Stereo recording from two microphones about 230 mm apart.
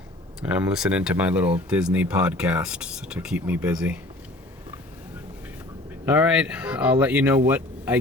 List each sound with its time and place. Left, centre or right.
0.4 s speech: centre
6.1 s speech: centre